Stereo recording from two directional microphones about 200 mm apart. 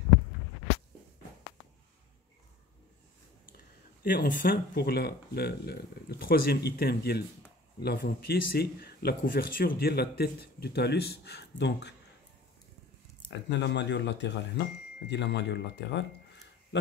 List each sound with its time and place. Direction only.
4.0 s a man's voice: 45° left (ahead or behind)
13.6 s speech: 60° left (ahead or behind)